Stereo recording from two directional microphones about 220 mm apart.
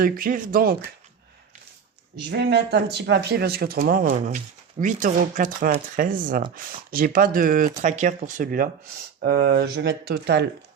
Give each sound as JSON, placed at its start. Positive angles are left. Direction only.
{"t": 0.0, "sound": "speech", "side_deg": -40}
{"t": 2.1, "sound": "speech", "side_deg": -50}